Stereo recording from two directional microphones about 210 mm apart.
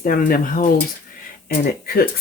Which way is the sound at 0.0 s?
40° left (ahead or behind).